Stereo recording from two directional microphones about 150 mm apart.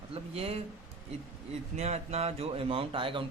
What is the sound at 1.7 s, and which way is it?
A man's voice, 45° right (ahead or behind).